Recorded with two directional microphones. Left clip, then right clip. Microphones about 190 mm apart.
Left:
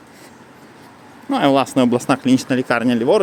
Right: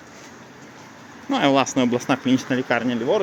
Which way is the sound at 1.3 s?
20° left (ahead or behind).